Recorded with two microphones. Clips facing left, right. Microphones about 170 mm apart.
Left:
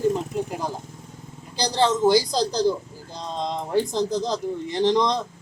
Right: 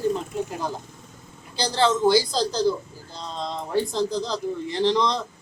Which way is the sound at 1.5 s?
15° left (ahead or behind).